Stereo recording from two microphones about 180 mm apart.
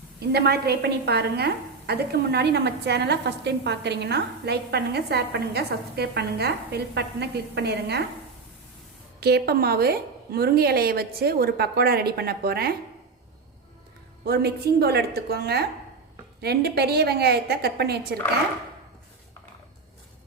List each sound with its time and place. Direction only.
0.2 s a woman's voice: 65° right (ahead or behind)
9.2 s a woman's voice: 60° right (ahead or behind)
14.3 s a woman's voice: 60° right (ahead or behind)